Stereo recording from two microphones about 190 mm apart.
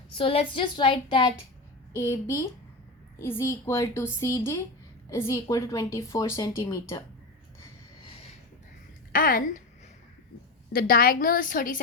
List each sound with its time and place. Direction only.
0.2 s a woman's voice: 30° left (ahead or behind)
9.1 s a woman's voice: 50° left (ahead or behind)
10.7 s a woman's voice: 50° left (ahead or behind)